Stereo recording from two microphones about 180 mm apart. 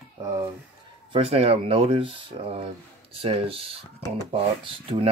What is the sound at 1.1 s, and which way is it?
Speech, 30° right (ahead or behind).